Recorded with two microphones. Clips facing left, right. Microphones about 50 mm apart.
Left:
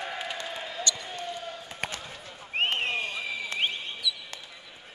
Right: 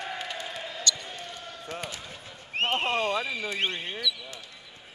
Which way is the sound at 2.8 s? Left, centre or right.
Right.